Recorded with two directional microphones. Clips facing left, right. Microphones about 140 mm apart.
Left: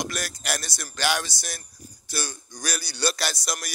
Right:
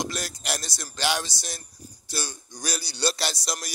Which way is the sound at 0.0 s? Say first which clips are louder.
Even; 25° right (ahead or behind).